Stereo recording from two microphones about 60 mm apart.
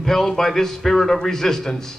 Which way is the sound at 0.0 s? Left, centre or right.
Centre.